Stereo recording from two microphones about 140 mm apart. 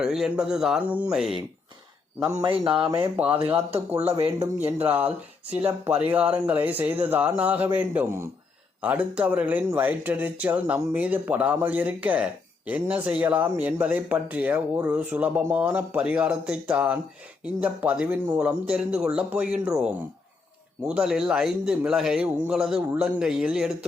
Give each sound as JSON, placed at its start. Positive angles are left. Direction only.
{"t": 0.0, "sound": "a man's voice", "side_deg": -5}
{"t": 2.4, "sound": "speech", "side_deg": -35}
{"t": 2.7, "sound": "a man's voice", "side_deg": -5}
{"t": 4.2, "sound": "speech", "side_deg": -15}
{"t": 20.8, "sound": "a man's voice", "side_deg": -5}